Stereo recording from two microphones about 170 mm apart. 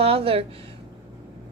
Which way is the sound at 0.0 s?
35° right (ahead or behind).